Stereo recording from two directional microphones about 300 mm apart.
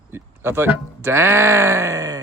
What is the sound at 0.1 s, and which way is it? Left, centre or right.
Speech, centre.